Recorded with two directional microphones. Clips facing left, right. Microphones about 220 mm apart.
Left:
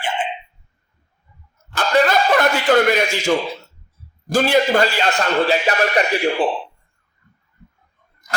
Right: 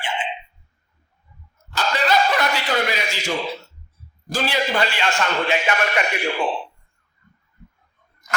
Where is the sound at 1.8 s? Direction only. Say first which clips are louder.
Left 4 dB; 50° left (ahead or behind).